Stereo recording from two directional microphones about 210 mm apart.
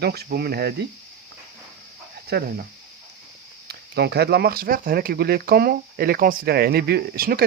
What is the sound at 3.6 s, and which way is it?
Speech, 50° right (ahead or behind).